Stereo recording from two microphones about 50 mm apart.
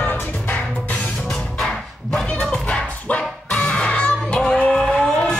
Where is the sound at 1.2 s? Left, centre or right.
Centre.